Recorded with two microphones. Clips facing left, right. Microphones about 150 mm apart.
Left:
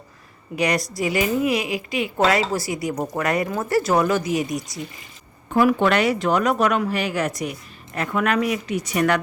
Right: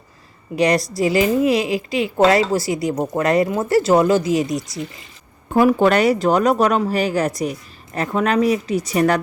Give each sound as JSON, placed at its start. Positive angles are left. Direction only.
{"t": 0.5, "sound": "a woman's voice", "side_deg": -30}